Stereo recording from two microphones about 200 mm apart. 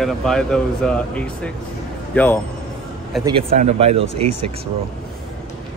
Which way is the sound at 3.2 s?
25° right (ahead or behind).